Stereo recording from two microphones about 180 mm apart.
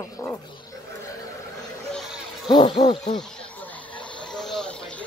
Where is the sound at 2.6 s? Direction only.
35° left (ahead or behind).